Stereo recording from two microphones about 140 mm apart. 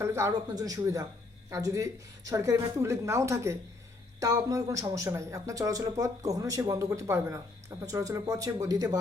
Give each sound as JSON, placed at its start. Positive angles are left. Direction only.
{"t": 0.0, "sound": "speech", "side_deg": -20}